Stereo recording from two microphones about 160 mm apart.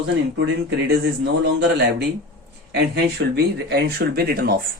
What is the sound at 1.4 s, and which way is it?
Speech, 90° right.